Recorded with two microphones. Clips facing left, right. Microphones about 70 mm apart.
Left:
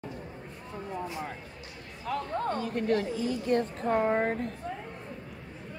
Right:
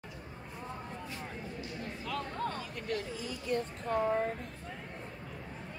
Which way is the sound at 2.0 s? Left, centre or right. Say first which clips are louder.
Left 6 dB; left.